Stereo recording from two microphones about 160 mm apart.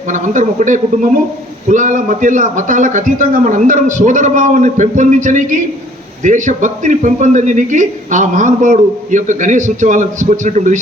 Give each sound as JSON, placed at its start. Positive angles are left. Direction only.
{"t": 0.1, "sound": "a man's voice", "side_deg": -50}